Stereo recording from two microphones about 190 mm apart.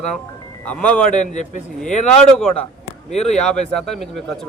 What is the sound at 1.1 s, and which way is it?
Speech, 40° left (ahead or behind).